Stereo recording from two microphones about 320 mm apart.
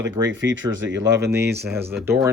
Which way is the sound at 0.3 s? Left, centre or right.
Right.